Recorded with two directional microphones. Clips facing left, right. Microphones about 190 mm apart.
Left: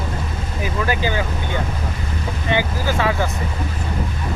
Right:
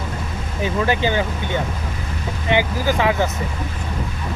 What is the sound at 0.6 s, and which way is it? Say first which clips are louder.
Speech: right 3 dB; 25° right (ahead or behind).